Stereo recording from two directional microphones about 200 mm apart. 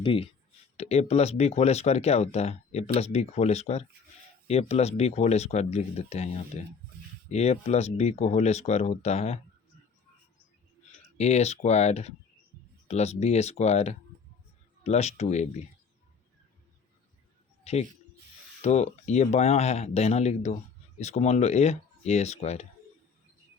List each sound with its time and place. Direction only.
0.0 s speech: 25° left (ahead or behind)
11.2 s speech: 35° left (ahead or behind)
17.6 s a sound: 30° left (ahead or behind)
18.6 s speech: 35° left (ahead or behind)